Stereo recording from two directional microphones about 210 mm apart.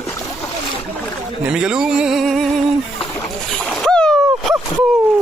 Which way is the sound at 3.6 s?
5° left (ahead or behind).